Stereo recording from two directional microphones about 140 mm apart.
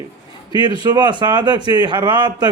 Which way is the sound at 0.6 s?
30° right (ahead or behind).